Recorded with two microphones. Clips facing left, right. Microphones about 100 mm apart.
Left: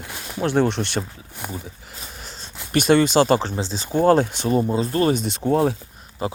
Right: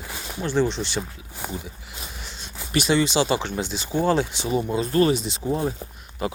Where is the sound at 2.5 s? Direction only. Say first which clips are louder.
Even; centre (ahead or behind).